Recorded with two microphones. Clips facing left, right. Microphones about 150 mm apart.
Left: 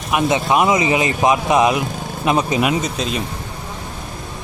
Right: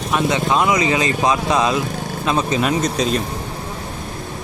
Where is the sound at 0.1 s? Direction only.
15° left (ahead or behind).